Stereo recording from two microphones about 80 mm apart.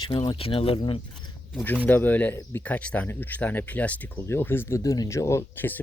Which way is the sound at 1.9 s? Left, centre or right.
Centre.